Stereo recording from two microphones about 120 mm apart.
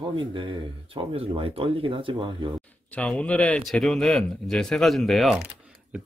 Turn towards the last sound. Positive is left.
turn(degrees=-5)  # may be behind; listen again after turning